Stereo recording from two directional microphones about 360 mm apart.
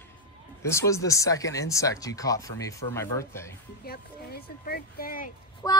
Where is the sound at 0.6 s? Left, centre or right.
Centre.